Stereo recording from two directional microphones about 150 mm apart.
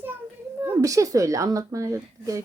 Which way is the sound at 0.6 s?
20° right (ahead or behind).